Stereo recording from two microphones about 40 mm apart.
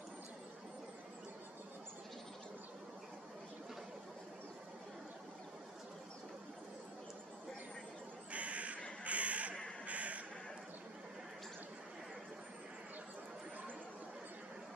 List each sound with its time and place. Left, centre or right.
8.3 s crow: right
9.8 s duck: right